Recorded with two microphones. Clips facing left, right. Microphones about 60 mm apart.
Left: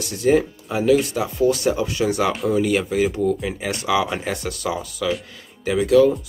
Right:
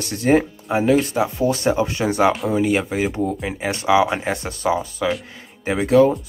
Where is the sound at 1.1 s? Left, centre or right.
Right.